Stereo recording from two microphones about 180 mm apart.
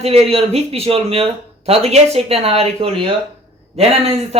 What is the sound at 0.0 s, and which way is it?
Speech, 35° right (ahead or behind).